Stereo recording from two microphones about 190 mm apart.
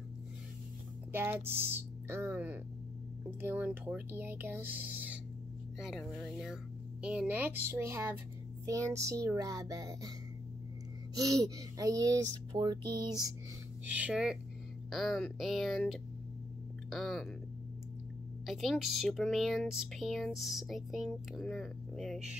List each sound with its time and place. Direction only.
1.1 s speech: 10° right (ahead or behind)
11.1 s speech: 15° right (ahead or behind)
13.9 s speech: 5° right (ahead or behind)
18.4 s speech: centre (ahead or behind)